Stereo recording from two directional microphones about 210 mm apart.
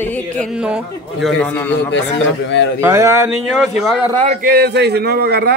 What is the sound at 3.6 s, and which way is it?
Speech, centre (ahead or behind).